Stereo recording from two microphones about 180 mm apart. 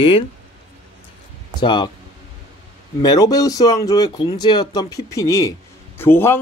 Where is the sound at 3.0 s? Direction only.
20° left (ahead or behind).